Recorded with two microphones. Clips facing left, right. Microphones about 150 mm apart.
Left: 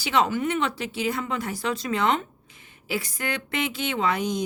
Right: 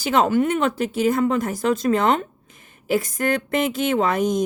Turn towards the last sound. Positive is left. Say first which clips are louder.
# right 6 dB
turn(degrees=-45)  # may be behind; listen again after turning